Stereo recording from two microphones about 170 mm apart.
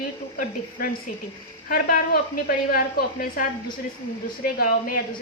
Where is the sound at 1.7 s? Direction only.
60° left (ahead or behind).